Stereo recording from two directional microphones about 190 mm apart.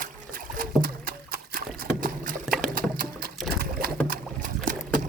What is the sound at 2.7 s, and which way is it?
Water, 50° right (ahead or behind).